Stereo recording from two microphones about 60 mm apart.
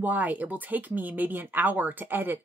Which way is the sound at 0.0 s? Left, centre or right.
Right.